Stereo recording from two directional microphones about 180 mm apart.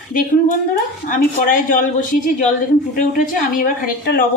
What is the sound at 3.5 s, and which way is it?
Speech, 55° left (ahead or behind).